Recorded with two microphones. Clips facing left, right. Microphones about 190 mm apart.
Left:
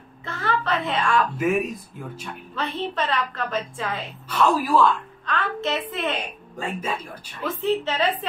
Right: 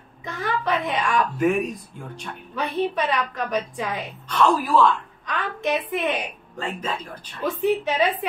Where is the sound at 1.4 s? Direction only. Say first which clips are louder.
Right 4 dB; 5° left (ahead or behind).